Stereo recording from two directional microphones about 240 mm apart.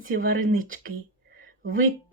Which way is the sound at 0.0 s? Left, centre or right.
Right.